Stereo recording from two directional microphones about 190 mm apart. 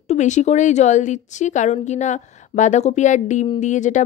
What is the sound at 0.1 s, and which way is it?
A woman's voice, 40° left (ahead or behind).